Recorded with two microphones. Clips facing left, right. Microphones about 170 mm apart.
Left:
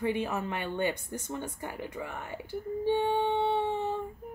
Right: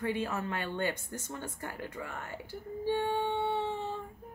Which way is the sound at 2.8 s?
15° left (ahead or behind).